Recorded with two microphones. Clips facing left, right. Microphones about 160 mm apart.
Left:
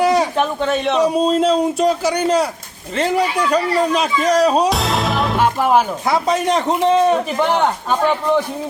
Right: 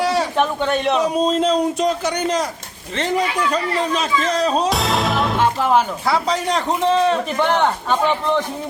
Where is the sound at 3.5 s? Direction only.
10° left (ahead or behind).